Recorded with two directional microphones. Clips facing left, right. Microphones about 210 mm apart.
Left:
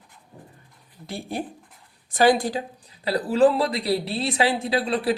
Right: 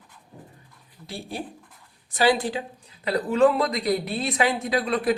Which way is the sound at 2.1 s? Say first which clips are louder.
Left 3 dB; 45° left (ahead or behind).